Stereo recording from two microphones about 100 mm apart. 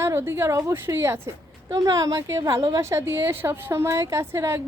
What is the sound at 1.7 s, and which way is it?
A woman's voice, 35° right (ahead or behind).